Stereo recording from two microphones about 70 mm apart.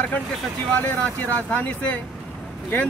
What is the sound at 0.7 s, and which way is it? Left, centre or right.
Speech, left.